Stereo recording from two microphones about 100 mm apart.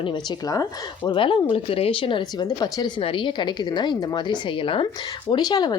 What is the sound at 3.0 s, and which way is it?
A woman's voice, 55° left (ahead or behind).